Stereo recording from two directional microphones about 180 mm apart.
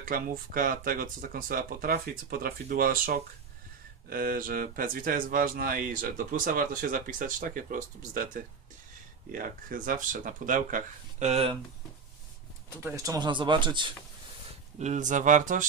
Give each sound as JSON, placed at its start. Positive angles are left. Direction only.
{"t": 0.0, "sound": "speech", "side_deg": -50}
{"t": 12.6, "sound": "speech", "side_deg": -15}
{"t": 14.8, "sound": "speech", "side_deg": -40}